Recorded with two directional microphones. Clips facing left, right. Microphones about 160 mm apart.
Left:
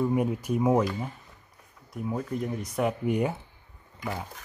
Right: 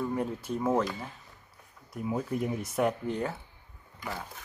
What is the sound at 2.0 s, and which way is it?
Speech, 5° right (ahead or behind).